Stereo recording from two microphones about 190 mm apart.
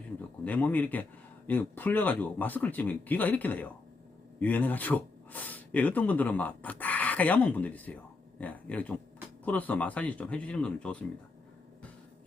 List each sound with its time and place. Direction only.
0.4 s speech: 10° left (ahead or behind)